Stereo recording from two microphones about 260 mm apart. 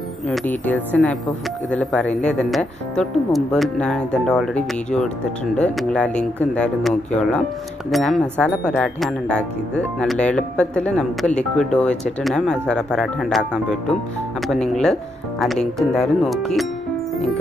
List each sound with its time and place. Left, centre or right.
0.3 s speech: centre